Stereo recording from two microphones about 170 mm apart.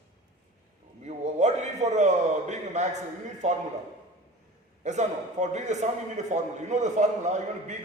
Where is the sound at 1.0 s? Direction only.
45° right (ahead or behind).